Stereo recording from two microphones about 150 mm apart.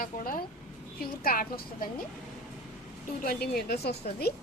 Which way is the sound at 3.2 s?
80° left.